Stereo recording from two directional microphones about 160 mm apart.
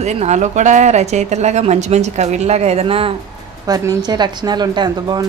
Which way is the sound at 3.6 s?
25° right (ahead or behind).